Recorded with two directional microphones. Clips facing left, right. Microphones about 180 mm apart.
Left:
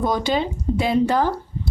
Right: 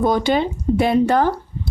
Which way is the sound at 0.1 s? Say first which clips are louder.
Right 4 dB; 60° right (ahead or behind).